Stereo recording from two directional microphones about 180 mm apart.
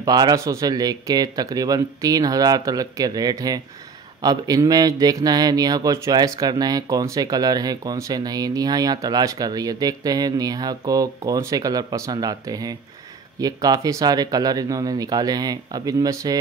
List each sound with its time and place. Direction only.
0.0 s a man's voice: 20° right (ahead or behind)